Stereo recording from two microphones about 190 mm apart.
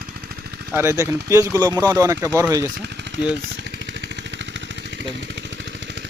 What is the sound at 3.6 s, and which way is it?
Vehicle, 70° right (ahead or behind).